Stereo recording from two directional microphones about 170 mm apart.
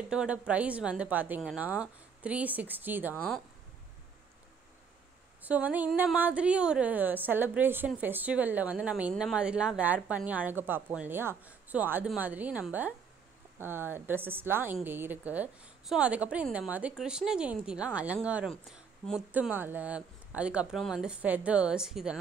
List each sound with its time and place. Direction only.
0.1 s a woman's voice: 5° right (ahead or behind)
3.2 s speech: 5° left (ahead or behind)
5.4 s a woman's voice: 10° right (ahead or behind)